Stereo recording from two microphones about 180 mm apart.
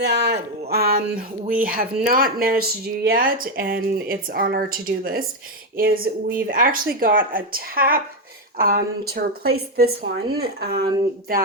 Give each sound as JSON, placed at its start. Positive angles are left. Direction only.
{"t": 0.0, "sound": "a woman's voice", "side_deg": -70}